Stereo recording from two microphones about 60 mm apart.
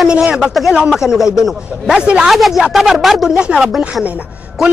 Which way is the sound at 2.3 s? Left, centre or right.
Centre.